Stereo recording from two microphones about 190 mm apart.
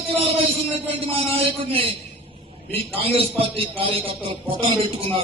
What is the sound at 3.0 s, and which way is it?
A man's voice, 30° right (ahead or behind).